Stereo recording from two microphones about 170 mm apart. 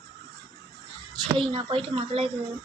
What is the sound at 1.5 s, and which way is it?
Speech, 30° right (ahead or behind).